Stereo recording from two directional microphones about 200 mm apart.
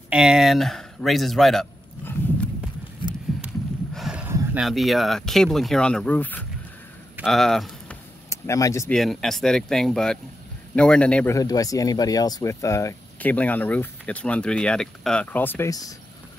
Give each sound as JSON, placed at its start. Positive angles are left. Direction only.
{"t": 0.1, "sound": "speech", "side_deg": -5}
{"t": 3.0, "sound": "a sound", "side_deg": 25}
{"t": 3.3, "sound": "speech", "side_deg": -5}
{"t": 7.2, "sound": "a sound", "side_deg": 0}
{"t": 8.3, "sound": "speech", "side_deg": 15}
{"t": 8.9, "sound": "speech", "side_deg": 0}
{"t": 11.3, "sound": "speech", "side_deg": 15}